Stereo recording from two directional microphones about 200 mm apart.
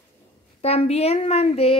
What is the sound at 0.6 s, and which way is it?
A woman's voice, 30° left (ahead or behind).